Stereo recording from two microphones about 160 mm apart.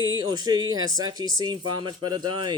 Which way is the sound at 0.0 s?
25° right (ahead or behind).